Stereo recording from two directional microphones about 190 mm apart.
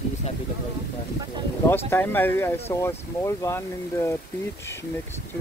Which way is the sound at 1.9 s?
10° left (ahead or behind).